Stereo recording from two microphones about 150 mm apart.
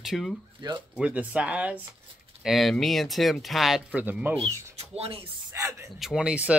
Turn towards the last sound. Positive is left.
turn(degrees=-5)  # may be behind; listen again after turning